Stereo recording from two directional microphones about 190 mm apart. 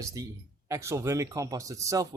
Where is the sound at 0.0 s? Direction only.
20° right (ahead or behind).